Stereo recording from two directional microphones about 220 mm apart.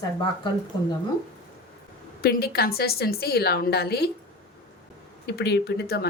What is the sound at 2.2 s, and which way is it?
Speech, 45° left (ahead or behind).